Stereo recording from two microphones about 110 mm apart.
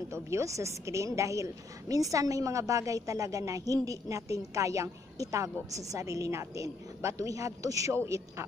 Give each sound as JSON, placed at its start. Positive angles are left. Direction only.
{"t": 0.1, "sound": "a woman's voice", "side_deg": -25}